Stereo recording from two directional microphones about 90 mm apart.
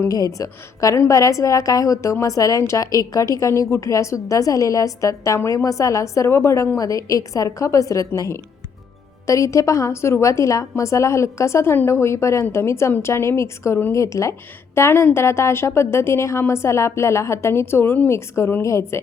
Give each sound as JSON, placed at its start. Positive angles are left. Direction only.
{"t": 0.0, "sound": "a woman's voice", "side_deg": 40}